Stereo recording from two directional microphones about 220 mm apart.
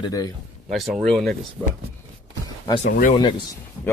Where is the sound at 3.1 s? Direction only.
20° left (ahead or behind).